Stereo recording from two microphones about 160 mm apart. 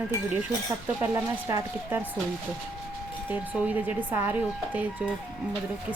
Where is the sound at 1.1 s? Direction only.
15° right (ahead or behind).